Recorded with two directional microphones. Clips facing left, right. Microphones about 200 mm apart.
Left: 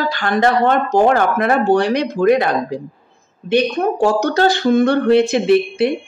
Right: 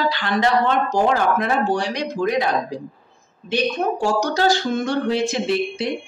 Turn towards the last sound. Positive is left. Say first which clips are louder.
# left 8 dB
turn(degrees=60)  # may be behind; listen again after turning